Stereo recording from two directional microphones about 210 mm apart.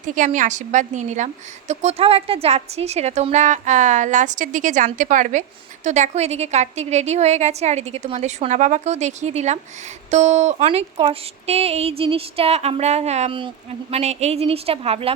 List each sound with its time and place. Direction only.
0.0 s a woman's voice: 35° right (ahead or behind)